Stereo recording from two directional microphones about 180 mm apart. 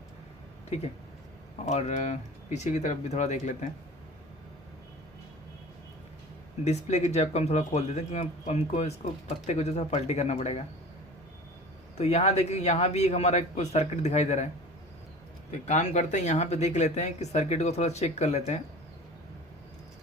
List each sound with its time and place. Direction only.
1.6 s speech: 40° left (ahead or behind)
6.7 s speech: 40° left (ahead or behind)
11.9 s speech: 35° left (ahead or behind)
15.6 s speech: 40° left (ahead or behind)